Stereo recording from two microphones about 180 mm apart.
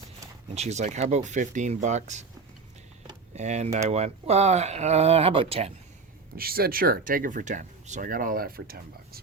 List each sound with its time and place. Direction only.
0.5 s speech: 40° right (ahead or behind)
3.3 s speech: 40° right (ahead or behind)
6.3 s speech: 55° right (ahead or behind)